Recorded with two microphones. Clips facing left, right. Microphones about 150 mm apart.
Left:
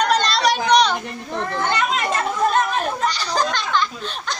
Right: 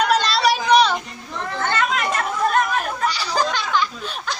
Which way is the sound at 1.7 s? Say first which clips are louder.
Right 1 dB; 20° left (ahead or behind).